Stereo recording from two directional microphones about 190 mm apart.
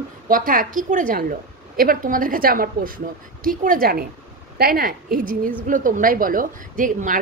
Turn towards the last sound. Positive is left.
turn(degrees=-45)  # may be behind; listen again after turning